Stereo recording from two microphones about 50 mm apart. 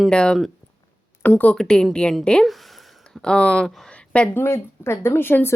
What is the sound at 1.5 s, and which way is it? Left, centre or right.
Speech, centre.